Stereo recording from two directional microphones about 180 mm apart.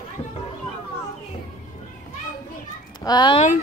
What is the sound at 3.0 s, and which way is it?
Speech, 25° left (ahead or behind).